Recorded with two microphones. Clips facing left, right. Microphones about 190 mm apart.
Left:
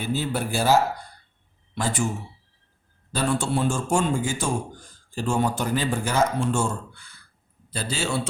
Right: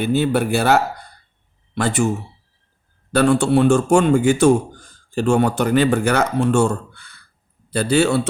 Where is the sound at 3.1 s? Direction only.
70° right (ahead or behind).